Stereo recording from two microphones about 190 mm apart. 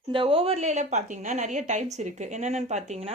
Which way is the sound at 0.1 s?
25° right (ahead or behind).